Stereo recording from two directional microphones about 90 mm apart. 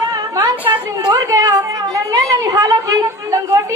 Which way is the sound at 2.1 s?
40° right (ahead or behind).